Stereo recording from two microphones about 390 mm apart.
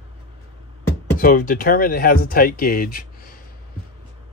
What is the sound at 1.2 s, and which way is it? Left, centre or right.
Speech, left.